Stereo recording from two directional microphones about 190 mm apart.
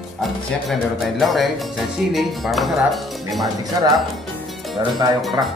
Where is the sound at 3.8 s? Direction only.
20° right (ahead or behind).